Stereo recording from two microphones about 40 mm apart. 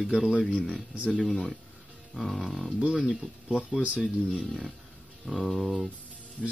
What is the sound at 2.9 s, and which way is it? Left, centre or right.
Speech, centre.